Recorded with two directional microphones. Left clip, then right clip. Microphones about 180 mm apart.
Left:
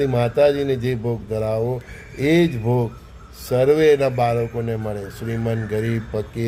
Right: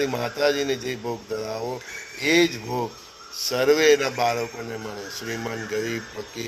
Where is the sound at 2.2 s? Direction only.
15° left (ahead or behind).